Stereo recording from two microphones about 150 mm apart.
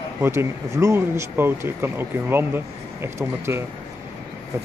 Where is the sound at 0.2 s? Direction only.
15° right (ahead or behind).